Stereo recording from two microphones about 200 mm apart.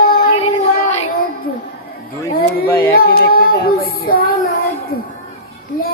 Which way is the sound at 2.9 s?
50° left (ahead or behind).